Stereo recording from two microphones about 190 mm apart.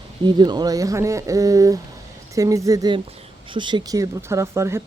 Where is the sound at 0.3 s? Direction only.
20° right (ahead or behind).